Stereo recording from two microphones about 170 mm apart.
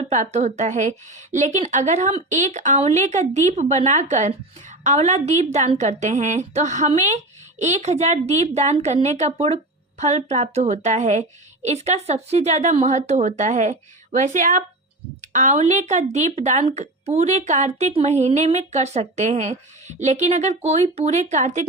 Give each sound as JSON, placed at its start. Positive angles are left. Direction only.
{"t": 0.0, "sound": "a woman's voice", "side_deg": -40}